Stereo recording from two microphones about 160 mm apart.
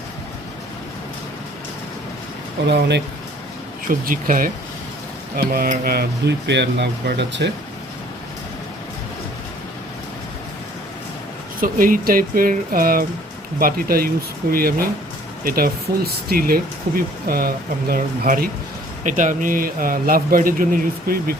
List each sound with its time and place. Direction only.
2.6 s speech: 90° right
4.0 s a man's voice: 60° right (ahead or behind)
5.4 s speech: 70° right (ahead or behind); by 7.5 s 90° right
11.6 s a man's voice: 60° right (ahead or behind)
19.0 s a man's voice: 55° right (ahead or behind)